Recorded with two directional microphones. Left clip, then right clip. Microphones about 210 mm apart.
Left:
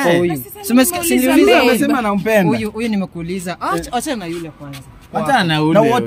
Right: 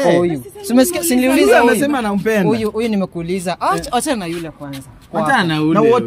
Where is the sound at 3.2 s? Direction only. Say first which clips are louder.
Right 4 dB; 20° right (ahead or behind).